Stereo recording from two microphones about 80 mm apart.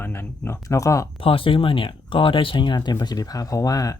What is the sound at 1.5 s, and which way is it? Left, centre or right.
Speech, left.